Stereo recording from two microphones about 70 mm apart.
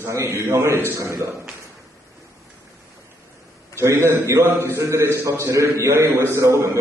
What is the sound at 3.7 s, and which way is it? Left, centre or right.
A man's voice, right.